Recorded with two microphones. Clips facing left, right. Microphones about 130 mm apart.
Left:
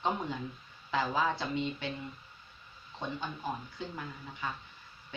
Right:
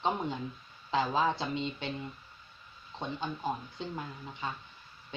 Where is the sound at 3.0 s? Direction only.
20° right (ahead or behind).